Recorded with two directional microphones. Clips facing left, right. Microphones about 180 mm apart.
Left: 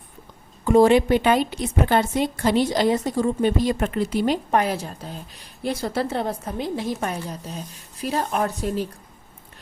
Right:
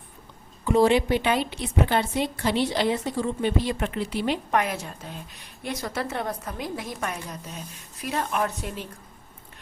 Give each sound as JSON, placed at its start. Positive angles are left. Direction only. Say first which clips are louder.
{"t": 0.6, "sound": "a woman's voice", "louder": "left 4 dB", "side_deg": 50}